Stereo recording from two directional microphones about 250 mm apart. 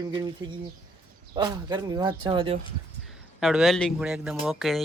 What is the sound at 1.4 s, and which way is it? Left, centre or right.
Speech, centre.